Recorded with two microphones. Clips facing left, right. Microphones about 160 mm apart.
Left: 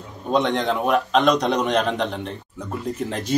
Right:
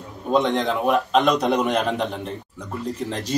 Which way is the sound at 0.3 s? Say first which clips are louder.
Even; 5° right (ahead or behind).